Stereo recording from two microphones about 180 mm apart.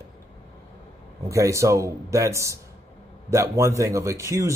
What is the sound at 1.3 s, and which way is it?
Speech, 15° right (ahead or behind).